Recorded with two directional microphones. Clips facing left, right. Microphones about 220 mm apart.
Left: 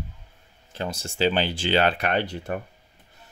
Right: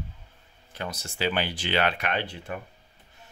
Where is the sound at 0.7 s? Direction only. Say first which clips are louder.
Left 4 dB; 30° left (ahead or behind).